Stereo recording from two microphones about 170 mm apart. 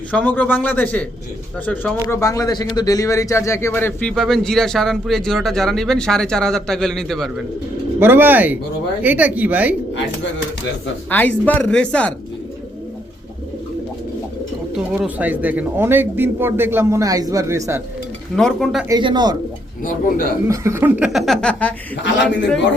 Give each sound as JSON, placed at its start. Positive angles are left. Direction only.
{"t": 0.1, "sound": "a man's voice", "side_deg": 10}
{"t": 7.9, "sound": "a man's voice", "side_deg": -15}
{"t": 11.1, "sound": "speech", "side_deg": 10}
{"t": 15.0, "sound": "a man's voice", "side_deg": -10}
{"t": 18.3, "sound": "a man's voice", "side_deg": 0}
{"t": 18.9, "sound": "speech", "side_deg": -25}
{"t": 19.8, "sound": "a man's voice", "side_deg": 55}
{"t": 20.5, "sound": "a man's voice", "side_deg": -15}
{"t": 22.0, "sound": "a man's voice", "side_deg": 90}